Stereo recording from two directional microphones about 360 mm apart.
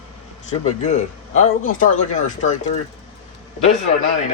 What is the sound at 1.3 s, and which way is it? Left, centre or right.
Speech, centre.